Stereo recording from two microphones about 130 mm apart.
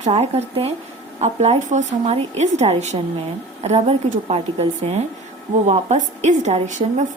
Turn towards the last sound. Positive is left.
turn(degrees=-70)  # may be behind; listen again after turning